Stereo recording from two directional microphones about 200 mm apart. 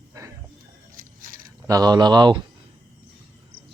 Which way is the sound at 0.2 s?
15° right (ahead or behind).